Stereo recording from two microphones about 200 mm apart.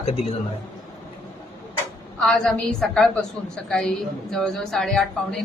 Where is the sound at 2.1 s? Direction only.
5° left (ahead or behind).